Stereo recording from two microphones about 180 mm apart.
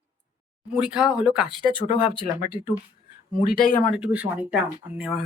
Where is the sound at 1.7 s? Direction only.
30° left (ahead or behind).